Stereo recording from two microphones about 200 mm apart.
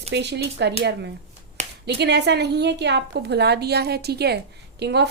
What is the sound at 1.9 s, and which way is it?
A woman's voice, 55° right (ahead or behind).